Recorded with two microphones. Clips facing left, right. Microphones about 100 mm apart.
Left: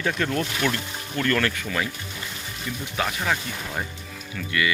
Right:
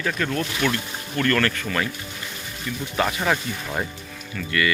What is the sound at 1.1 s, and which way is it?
Speech, 15° left (ahead or behind).